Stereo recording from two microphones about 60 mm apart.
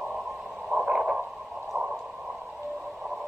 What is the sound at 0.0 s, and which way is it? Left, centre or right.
Radio, centre.